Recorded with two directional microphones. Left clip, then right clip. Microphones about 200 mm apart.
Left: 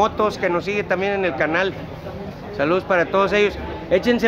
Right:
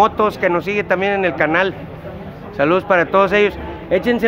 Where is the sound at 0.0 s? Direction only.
25° right (ahead or behind).